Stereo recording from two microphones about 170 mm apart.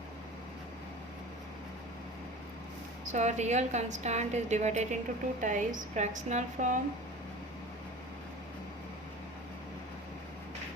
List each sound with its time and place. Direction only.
3.1 s a woman's voice: 45° right (ahead or behind)